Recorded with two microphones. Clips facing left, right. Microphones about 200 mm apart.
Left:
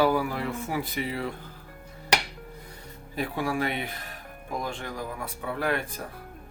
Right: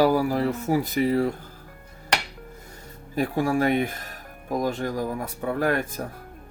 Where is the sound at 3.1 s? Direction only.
45° right (ahead or behind).